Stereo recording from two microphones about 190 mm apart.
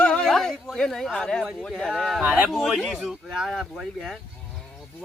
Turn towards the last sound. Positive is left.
turn(degrees=0)  # may be behind; listen again after turning